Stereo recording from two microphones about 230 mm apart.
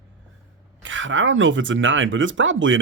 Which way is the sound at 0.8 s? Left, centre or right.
Right.